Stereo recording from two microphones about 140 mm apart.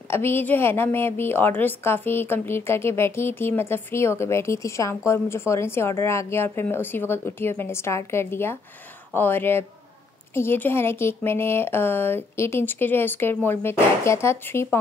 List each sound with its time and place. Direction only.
0.1 s a woman's voice: 15° left (ahead or behind)